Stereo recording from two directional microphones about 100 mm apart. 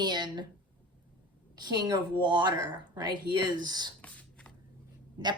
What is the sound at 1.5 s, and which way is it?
A woman's voice, 45° right (ahead or behind).